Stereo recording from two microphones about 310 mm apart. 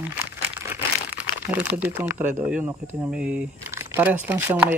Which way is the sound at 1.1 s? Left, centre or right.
Centre.